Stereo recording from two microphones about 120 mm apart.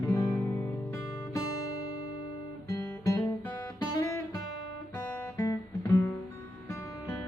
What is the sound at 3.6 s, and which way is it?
Guitar, 25° left (ahead or behind).